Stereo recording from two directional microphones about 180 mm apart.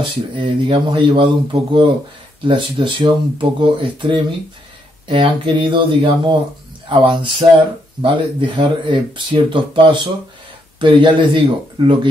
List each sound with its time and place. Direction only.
0.4 s speech: 30° right (ahead or behind)